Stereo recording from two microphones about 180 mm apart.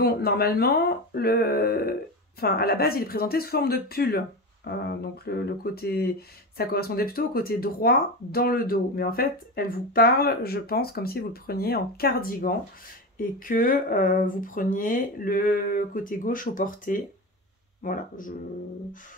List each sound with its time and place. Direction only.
0.0 s speech: 60° left (ahead or behind)